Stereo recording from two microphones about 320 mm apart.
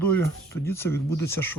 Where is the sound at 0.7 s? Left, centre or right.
Centre.